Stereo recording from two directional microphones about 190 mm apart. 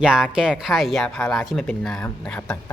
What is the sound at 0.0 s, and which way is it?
A woman's voice, 5° right (ahead or behind).